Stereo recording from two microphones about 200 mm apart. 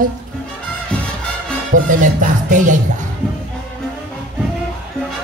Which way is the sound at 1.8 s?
40° right (ahead or behind).